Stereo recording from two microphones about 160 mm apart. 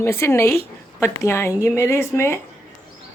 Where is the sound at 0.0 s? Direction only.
15° left (ahead or behind).